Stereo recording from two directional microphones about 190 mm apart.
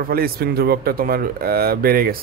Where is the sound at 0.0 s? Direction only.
50° right (ahead or behind).